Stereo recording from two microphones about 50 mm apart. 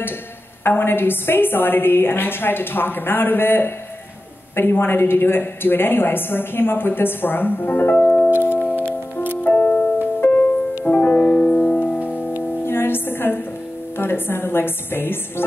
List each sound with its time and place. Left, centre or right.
0.7 s a woman's voice: left
8.4 s music: left
12.6 s music: left
13.9 s a woman's voice: left